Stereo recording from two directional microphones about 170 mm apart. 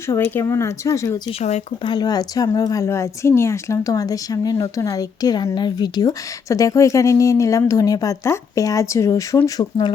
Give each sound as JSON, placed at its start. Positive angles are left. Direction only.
{"t": 0.1, "sound": "speech", "side_deg": 15}
{"t": 1.4, "sound": "a woman's voice", "side_deg": 40}